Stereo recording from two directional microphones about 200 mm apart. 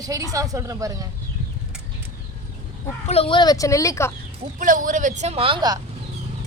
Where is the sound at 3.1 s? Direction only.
30° left (ahead or behind).